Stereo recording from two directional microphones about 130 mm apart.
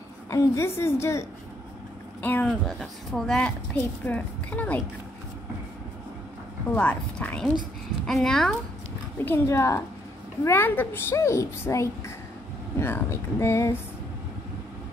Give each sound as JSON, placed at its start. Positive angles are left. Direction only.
{"t": 0.3, "sound": "a child's voice", "side_deg": 25}
{"t": 2.2, "sound": "a woman's voice", "side_deg": 15}
{"t": 6.7, "sound": "a woman's voice", "side_deg": 10}
{"t": 9.2, "sound": "a child's voice", "side_deg": 20}